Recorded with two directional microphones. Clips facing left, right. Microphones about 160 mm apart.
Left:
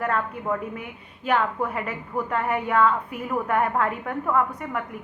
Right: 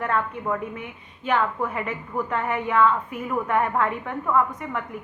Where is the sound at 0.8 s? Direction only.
40° left (ahead or behind).